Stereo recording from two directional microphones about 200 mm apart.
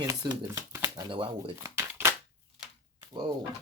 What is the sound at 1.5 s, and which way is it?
Shuffling cards, 15° right (ahead or behind).